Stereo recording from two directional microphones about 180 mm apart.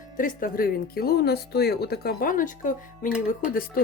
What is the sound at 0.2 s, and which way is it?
Speech, 50° left (ahead or behind).